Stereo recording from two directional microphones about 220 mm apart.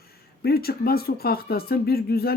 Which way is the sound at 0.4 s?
45° left (ahead or behind).